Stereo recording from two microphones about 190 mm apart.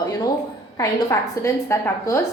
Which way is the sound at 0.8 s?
15° left (ahead or behind).